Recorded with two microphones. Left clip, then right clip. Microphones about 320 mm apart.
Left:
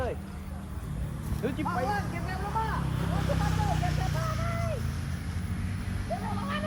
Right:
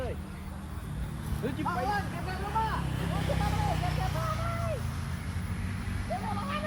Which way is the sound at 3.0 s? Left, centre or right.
Right.